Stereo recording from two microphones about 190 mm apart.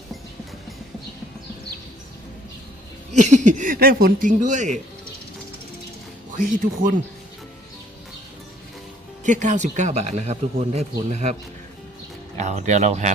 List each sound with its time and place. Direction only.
3.1 s a man's voice: 40° right (ahead or behind)
6.3 s speech: 45° right (ahead or behind)
9.2 s a man's voice: 40° right (ahead or behind)
12.4 s a man's voice: 40° right (ahead or behind)